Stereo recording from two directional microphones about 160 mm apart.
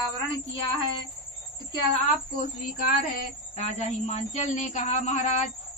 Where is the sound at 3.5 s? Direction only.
45° left (ahead or behind).